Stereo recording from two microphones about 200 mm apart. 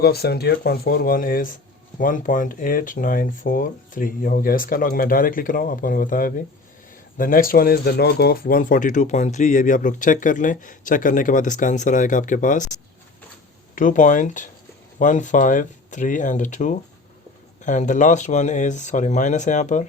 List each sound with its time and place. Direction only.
0.0 s speech: 50° left (ahead or behind)
13.7 s speech: 40° left (ahead or behind)